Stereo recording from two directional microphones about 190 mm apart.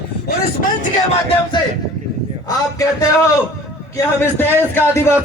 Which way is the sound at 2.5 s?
15° left (ahead or behind).